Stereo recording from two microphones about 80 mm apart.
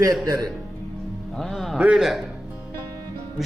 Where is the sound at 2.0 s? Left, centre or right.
Centre.